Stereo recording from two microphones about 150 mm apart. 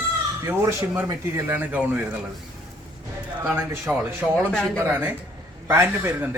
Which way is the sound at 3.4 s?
10° right (ahead or behind).